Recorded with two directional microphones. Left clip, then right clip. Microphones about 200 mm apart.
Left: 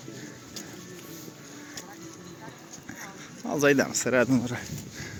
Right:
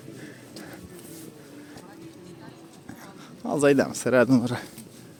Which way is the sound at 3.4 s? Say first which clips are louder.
Right 2 dB; 20° right (ahead or behind).